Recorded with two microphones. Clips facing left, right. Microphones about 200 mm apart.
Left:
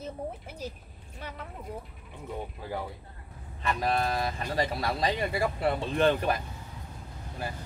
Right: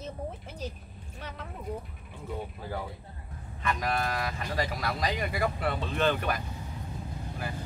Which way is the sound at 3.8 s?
30° left (ahead or behind).